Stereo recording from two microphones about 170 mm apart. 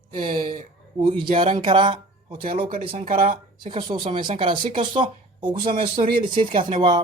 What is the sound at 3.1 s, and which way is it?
Speech, 55° right (ahead or behind).